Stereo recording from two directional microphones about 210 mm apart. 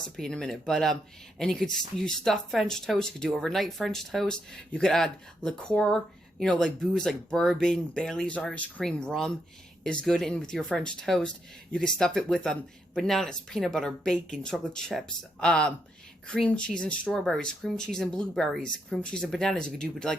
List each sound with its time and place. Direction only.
0.0 s speech: 5° left (ahead or behind)